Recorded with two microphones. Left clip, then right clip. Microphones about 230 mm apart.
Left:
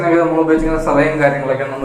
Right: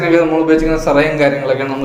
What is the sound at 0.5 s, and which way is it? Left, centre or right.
Speech, right.